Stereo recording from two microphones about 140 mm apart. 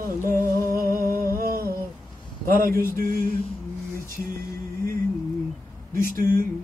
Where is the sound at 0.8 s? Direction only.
90° right.